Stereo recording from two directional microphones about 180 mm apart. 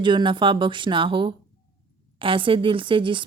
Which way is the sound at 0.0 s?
25° right (ahead or behind).